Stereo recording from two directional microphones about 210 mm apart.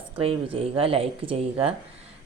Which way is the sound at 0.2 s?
25° right (ahead or behind).